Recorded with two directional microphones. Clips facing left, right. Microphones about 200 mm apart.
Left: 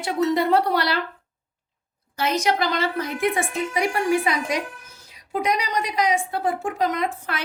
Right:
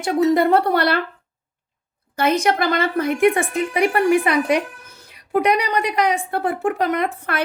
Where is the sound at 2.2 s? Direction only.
55° right (ahead or behind).